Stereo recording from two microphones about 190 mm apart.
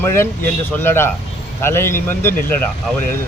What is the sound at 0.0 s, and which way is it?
Speech, 15° left (ahead or behind).